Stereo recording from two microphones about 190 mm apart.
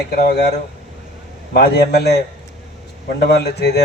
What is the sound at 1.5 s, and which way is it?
Speech, 60° left (ahead or behind).